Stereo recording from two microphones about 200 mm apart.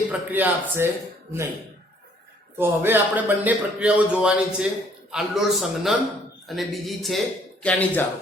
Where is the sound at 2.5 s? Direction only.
10° right (ahead or behind); by 8.1 s 10° left (ahead or behind).